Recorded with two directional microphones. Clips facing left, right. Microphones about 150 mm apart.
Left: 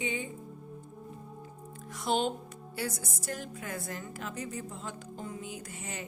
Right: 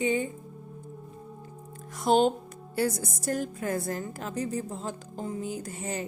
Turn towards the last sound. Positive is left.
turn(degrees=-35)  # may be behind; listen again after turning